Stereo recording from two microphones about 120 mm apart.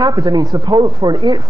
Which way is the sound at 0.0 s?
35° right (ahead or behind).